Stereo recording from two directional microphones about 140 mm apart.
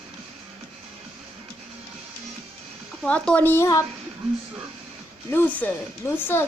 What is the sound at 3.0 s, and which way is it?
Speech, 10° left (ahead or behind).